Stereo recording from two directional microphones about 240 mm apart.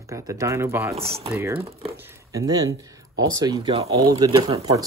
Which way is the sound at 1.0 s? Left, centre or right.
Right.